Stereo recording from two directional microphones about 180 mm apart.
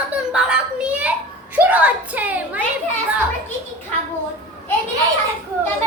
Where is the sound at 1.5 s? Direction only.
10° right (ahead or behind).